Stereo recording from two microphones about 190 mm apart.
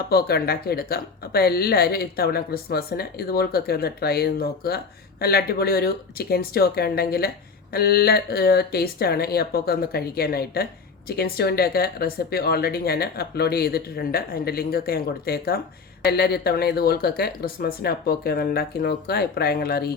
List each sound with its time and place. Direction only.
0.1 s speech: 55° left (ahead or behind)